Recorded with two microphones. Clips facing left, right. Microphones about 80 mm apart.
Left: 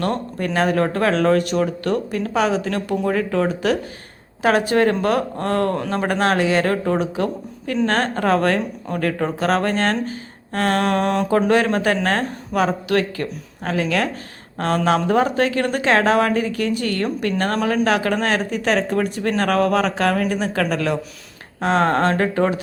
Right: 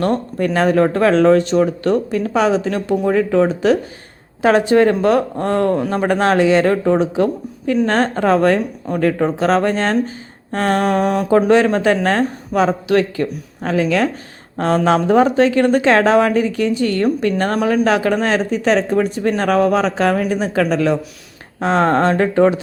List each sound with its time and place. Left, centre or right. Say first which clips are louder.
0.0 s speech: right 5 dB; right
6.1 s speech: right 5 dB; right